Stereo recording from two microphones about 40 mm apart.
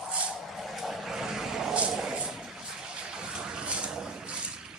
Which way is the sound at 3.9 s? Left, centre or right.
Centre.